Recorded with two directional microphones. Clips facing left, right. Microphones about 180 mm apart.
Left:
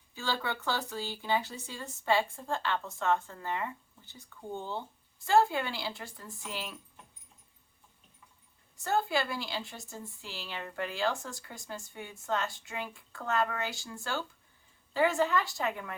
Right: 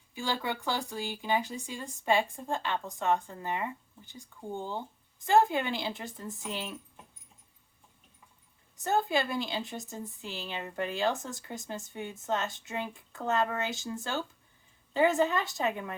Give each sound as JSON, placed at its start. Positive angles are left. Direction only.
{"t": 0.1, "sound": "speech", "side_deg": -15}
{"t": 8.8, "sound": "speech", "side_deg": -20}